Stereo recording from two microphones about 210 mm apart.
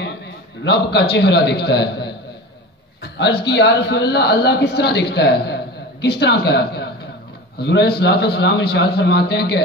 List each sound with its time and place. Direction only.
0.9 s a man's voice: 50° left (ahead or behind)